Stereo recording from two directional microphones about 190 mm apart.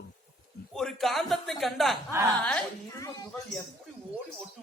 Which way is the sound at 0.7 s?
Centre (ahead or behind).